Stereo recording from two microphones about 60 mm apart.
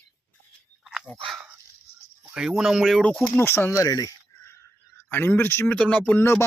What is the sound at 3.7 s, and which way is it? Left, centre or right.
Speech, left.